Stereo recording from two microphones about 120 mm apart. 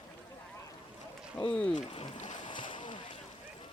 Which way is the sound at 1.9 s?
40° left (ahead or behind).